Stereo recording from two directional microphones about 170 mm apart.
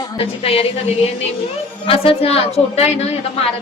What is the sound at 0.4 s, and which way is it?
A woman's voice, 35° left (ahead or behind).